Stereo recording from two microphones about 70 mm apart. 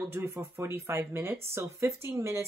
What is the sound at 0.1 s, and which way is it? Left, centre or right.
Speech, right.